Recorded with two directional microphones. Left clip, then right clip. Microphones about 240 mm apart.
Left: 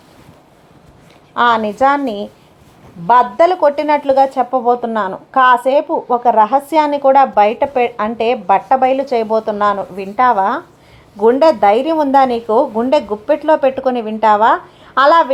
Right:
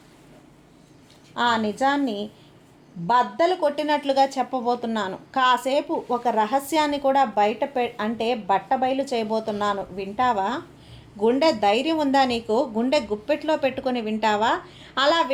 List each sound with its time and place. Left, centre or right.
1.3 s speech: centre